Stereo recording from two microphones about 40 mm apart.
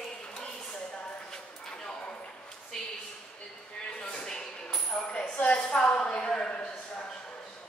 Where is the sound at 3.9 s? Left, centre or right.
Centre.